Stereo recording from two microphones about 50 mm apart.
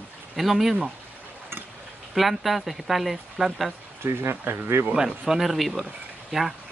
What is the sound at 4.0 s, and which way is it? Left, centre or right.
Speech, right.